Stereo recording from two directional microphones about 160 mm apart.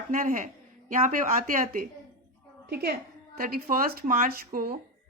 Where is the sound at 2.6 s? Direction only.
90° right; by 4.8 s 65° right (ahead or behind).